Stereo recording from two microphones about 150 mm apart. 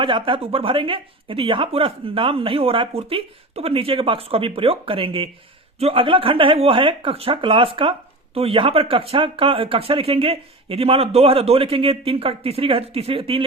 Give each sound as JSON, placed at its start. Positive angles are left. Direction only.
{"t": 0.0, "sound": "speech", "side_deg": -35}